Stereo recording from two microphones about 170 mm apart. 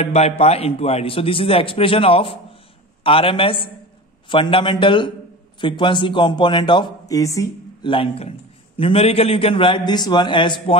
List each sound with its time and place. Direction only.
0.0 s a man's voice: 40° left (ahead or behind)